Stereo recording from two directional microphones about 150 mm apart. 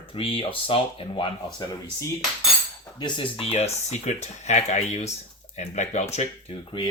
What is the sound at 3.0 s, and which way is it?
Speech, 30° left (ahead or behind).